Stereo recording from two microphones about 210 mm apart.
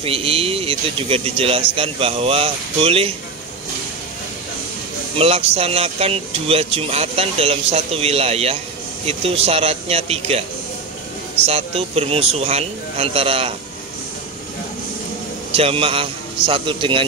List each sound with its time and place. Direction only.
0.0 s speech: 25° right (ahead or behind)
5.1 s speech: 30° right (ahead or behind)
11.4 s speech: 30° right (ahead or behind)
15.5 s speech: 25° right (ahead or behind)